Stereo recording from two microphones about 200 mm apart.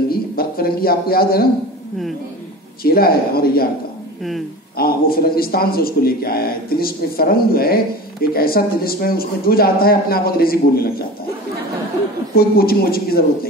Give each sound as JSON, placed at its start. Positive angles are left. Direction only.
{"t": 0.1, "sound": "a man's voice", "side_deg": 50}
{"t": 2.8, "sound": "speech", "side_deg": 50}
{"t": 4.7, "sound": "speech", "side_deg": 50}
{"t": 12.4, "sound": "speech", "side_deg": 50}